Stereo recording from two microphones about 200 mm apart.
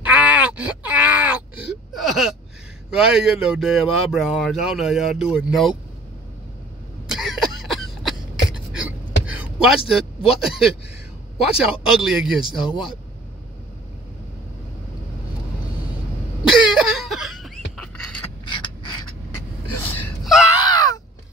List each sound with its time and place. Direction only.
0.0 s groan: 5° right (ahead or behind)
2.9 s speech: 5° right (ahead or behind)
7.1 s cough: centre (ahead or behind)
8.7 s a sound: 5° right (ahead or behind)
11.3 s speech: centre (ahead or behind)
16.4 s a sound: centre (ahead or behind)
18.5 s mechanisms: 25° left (ahead or behind)
20.0 s wail: centre (ahead or behind)
20.7 s a sound: 20° left (ahead or behind)